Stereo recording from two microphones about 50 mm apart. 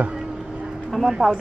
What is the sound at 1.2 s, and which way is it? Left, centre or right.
Speech, centre.